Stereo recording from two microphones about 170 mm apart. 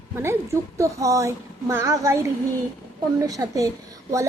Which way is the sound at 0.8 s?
20° right (ahead or behind).